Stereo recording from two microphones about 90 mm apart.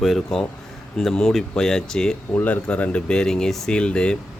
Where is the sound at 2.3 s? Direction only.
20° left (ahead or behind).